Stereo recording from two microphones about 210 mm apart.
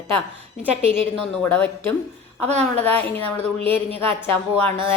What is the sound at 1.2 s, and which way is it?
A woman's voice, 5° left (ahead or behind).